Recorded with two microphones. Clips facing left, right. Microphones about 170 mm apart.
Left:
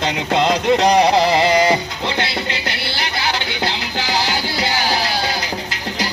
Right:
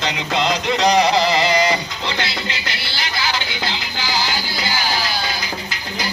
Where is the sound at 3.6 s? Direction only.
70° left (ahead or behind).